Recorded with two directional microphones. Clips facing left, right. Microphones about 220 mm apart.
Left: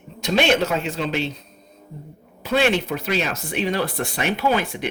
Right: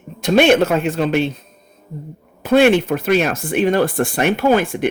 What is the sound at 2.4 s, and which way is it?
Speech, 50° right (ahead or behind).